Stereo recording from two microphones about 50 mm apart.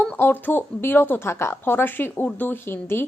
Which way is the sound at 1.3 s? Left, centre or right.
Left.